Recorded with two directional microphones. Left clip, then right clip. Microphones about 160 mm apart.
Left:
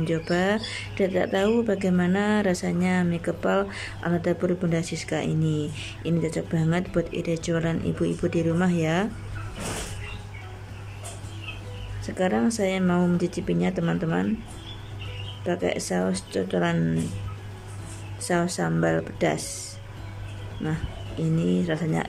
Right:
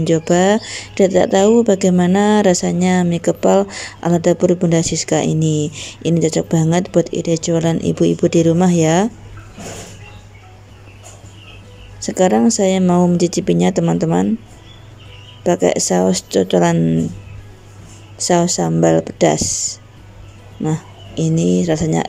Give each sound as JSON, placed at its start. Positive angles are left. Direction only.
{"t": 0.0, "sound": "speech", "side_deg": -30}
{"t": 12.0, "sound": "speech", "side_deg": -35}
{"t": 15.4, "sound": "speech", "side_deg": -35}
{"t": 18.2, "sound": "speech", "side_deg": -30}